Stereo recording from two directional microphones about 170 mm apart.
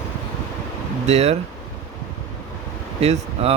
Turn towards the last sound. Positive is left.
turn(degrees=-35)  # may be behind; listen again after turning